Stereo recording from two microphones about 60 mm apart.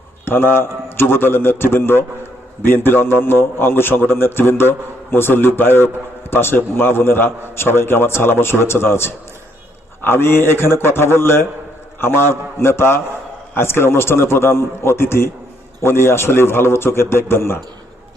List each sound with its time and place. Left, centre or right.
0.3 s a man's voice: left